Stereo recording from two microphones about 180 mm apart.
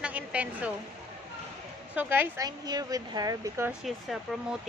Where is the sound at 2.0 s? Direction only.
10° right (ahead or behind).